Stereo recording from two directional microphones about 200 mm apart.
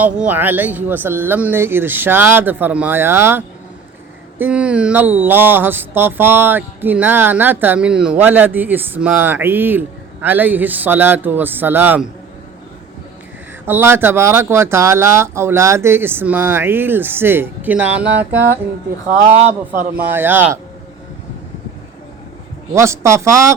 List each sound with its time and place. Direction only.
0.0 s speech: 10° right (ahead or behind)
13.7 s speech: 10° right (ahead or behind)
19.0 s speech: 35° right (ahead or behind)
20.0 s speech: 10° right (ahead or behind)
22.7 s speech: 15° right (ahead or behind)